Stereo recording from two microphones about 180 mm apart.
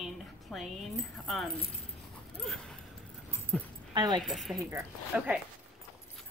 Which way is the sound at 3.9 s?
25° right (ahead or behind).